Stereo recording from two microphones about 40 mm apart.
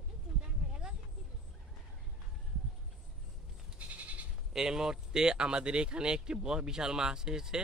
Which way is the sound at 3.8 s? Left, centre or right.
Right.